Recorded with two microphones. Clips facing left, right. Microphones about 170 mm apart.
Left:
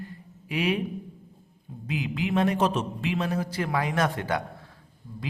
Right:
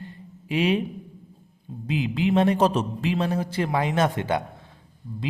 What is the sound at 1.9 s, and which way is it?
A man's voice, 25° right (ahead or behind).